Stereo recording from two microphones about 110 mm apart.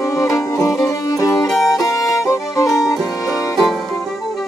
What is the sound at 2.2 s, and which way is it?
Violin, 30° left (ahead or behind).